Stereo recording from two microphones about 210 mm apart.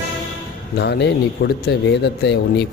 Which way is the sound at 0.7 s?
50° left (ahead or behind).